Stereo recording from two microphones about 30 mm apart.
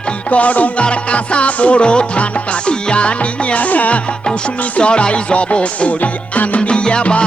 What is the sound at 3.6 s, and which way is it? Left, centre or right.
Music, left.